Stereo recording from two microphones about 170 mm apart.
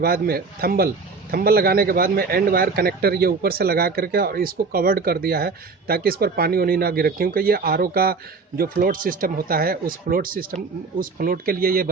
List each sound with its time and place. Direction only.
0.0 s a man's voice: 60° right (ahead or behind)